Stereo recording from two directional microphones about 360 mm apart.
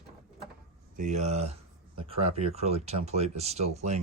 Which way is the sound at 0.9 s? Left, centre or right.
Centre.